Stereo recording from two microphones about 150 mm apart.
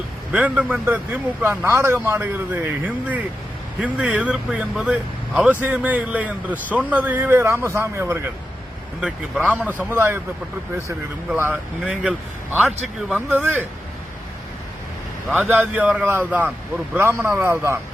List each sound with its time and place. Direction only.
0.3 s speech: 10° right (ahead or behind)
11.3 s a man's voice: 10° right (ahead or behind)
15.3 s speech: 5° right (ahead or behind)